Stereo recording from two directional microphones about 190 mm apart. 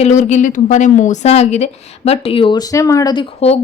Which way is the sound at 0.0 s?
35° left (ahead or behind).